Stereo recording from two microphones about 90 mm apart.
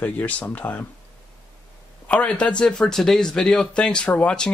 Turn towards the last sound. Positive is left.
turn(degrees=15)  # may be behind; listen again after turning